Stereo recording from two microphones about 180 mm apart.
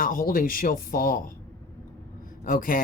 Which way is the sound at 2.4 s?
50° left (ahead or behind).